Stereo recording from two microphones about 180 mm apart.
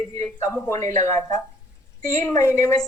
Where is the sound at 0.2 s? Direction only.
15° left (ahead or behind).